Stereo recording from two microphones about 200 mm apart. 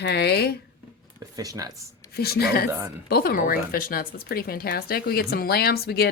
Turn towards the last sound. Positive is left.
turn(degrees=50)  # may be behind; listen again after turning